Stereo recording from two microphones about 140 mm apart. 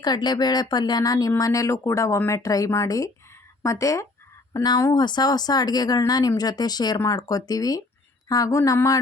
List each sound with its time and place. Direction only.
0.0 s speech: 30° left (ahead or behind)